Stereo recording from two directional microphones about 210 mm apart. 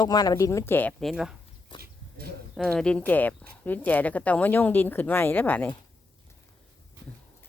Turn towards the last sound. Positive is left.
turn(degrees=10)  # may be behind; listen again after turning